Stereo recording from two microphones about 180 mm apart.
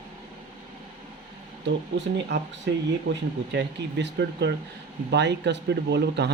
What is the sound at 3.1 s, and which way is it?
Speech, 80° right.